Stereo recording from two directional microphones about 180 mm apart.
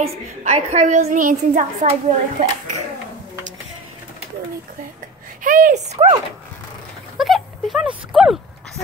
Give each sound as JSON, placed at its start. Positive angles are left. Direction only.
{"t": 0.0, "sound": "a woman's voice", "side_deg": -35}
{"t": 5.4, "sound": "a woman's voice", "side_deg": -50}
{"t": 7.2, "sound": "speech", "side_deg": 0}